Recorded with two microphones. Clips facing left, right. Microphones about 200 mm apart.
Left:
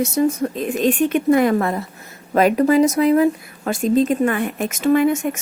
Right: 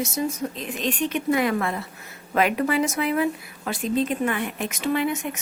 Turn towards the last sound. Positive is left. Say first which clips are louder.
# left 8 dB
turn(degrees=45)  # may be behind; listen again after turning